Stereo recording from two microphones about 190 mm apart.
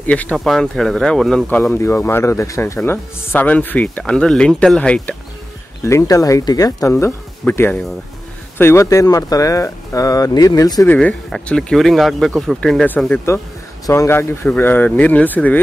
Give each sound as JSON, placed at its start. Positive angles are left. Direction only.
{"t": 0.0, "sound": "speech", "side_deg": 5}
{"t": 1.6, "sound": "speech", "side_deg": 15}
{"t": 5.9, "sound": "speech", "side_deg": 15}
{"t": 11.0, "sound": "speech", "side_deg": 5}